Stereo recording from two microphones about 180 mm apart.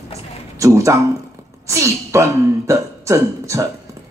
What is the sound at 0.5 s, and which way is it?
Speech, 15° right (ahead or behind).